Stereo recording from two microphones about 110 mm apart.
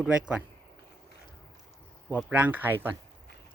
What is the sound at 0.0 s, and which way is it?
Speech, 10° right (ahead or behind).